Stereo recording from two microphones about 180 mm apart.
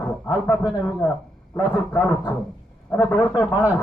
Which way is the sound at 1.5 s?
10° left (ahead or behind).